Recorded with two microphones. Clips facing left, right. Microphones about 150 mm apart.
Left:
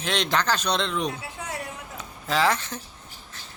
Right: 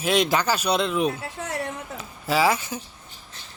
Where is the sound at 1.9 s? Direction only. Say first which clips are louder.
Right 2 dB; 10° right (ahead or behind).